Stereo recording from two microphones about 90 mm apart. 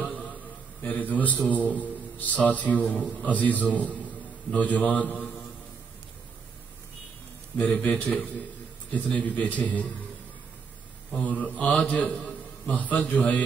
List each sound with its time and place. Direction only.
0.0 s a sound: 15° left (ahead or behind)
0.8 s a man's voice: 20° left (ahead or behind)
3.0 s a man's voice: 5° left (ahead or behind)
3.3 s a man's voice: 15° left (ahead or behind)
7.5 s a man's voice: 15° left (ahead or behind)
11.1 s a man's voice: 15° left (ahead or behind)